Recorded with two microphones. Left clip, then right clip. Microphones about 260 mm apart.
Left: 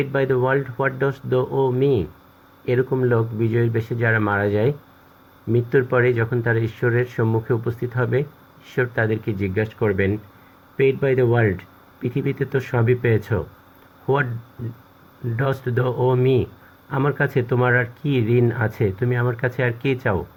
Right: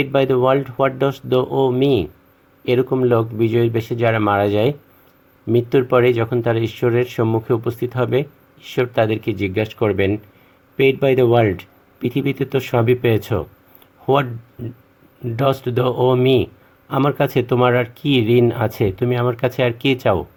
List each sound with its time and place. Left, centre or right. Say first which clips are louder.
0.0 s speech: right 5 dB; right
15.4 s speech: right 5 dB; right